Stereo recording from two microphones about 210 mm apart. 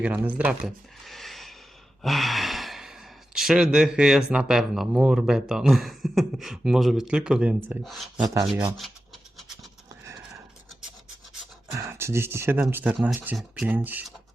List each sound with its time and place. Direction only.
0.0 s speech: 5° right (ahead or behind)
8.2 s speech: 20° right (ahead or behind)
11.7 s speech: 15° right (ahead or behind)